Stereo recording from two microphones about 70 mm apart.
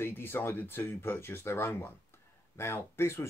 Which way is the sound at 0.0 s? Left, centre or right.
Left.